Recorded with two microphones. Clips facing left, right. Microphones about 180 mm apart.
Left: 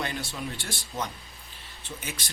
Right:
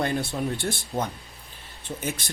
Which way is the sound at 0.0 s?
55° right (ahead or behind).